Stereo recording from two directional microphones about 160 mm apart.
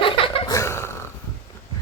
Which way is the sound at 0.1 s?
30° left (ahead or behind).